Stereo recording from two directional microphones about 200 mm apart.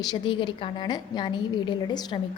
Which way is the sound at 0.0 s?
20° left (ahead or behind).